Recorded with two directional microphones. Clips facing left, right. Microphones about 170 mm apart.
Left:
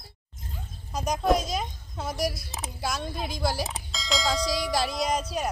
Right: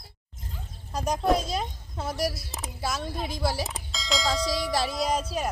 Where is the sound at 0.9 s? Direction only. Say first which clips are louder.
Even; centre (ahead or behind).